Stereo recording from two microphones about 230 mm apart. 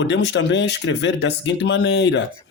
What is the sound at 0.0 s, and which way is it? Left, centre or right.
Speech, left.